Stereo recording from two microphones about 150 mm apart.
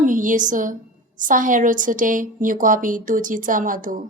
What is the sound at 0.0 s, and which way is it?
A woman's voice, 60° right (ahead or behind).